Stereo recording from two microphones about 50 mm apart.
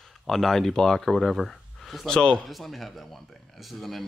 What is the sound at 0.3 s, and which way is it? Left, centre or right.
Speech, centre.